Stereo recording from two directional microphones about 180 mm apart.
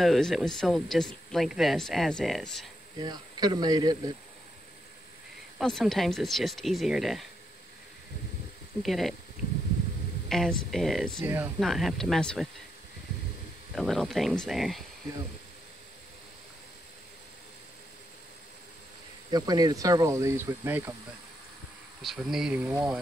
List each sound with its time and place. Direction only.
0.0 s speech: centre (ahead or behind)
3.0 s speech: 25° right (ahead or behind)
5.6 s speech: centre (ahead or behind)
8.8 s speech: centre (ahead or behind)
10.2 s speech: centre (ahead or behind)
11.2 s speech: 10° right (ahead or behind)
11.6 s speech: centre (ahead or behind)
13.7 s speech: centre (ahead or behind)
19.3 s speech: 20° right (ahead or behind)
22.0 s speech: centre (ahead or behind)